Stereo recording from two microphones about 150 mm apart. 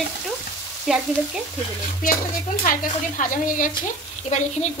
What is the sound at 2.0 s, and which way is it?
A woman's voice, 65° left (ahead or behind).